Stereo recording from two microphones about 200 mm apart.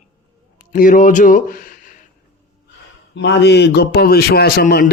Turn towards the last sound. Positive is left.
turn(degrees=50)  # may be behind; listen again after turning